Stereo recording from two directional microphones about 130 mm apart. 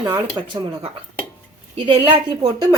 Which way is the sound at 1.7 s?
40° right (ahead or behind).